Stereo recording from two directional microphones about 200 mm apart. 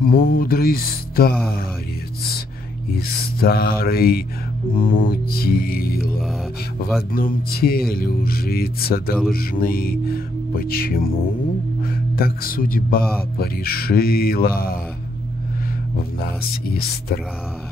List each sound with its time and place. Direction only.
0.0 s speech: 45° left (ahead or behind)
2.9 s speech: 50° left (ahead or behind)
7.1 s speech: 45° left (ahead or behind)
16.2 s speech: 50° left (ahead or behind)